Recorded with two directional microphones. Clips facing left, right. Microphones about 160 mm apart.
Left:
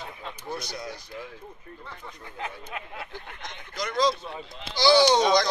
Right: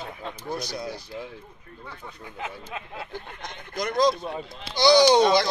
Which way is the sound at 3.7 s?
55° right (ahead or behind).